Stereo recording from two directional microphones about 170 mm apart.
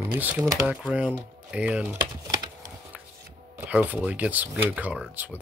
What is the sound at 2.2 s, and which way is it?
Typing, 20° right (ahead or behind).